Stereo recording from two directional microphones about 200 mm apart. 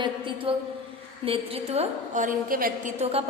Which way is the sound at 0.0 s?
25° right (ahead or behind).